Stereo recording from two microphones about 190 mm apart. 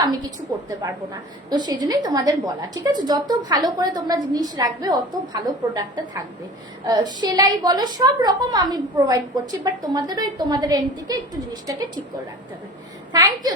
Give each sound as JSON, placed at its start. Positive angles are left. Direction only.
{"t": 0.0, "sound": "a woman's voice", "side_deg": -20}
{"t": 1.5, "sound": "a woman's voice", "side_deg": -20}
{"t": 13.1, "sound": "a woman's voice", "side_deg": -20}